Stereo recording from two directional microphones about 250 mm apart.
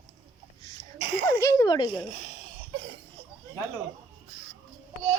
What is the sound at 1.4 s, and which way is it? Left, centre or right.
Speech, centre.